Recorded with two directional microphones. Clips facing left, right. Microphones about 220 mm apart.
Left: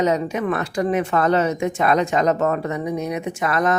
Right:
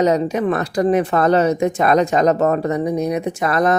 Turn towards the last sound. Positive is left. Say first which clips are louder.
# right 3 dB
turn(degrees=-35)  # may be behind; listen again after turning